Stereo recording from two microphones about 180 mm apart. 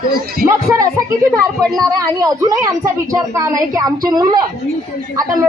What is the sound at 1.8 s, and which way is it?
A woman's voice, 20° right (ahead or behind).